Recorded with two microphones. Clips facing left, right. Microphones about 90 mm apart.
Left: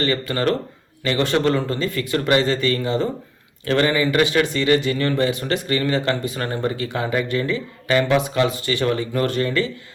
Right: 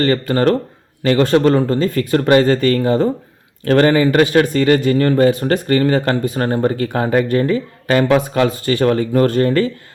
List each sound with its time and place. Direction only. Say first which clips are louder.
0.0 s speech: right 6 dB; 40° right (ahead or behind)